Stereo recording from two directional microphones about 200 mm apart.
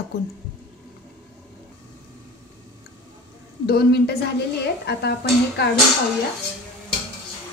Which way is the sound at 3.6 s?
55° left (ahead or behind).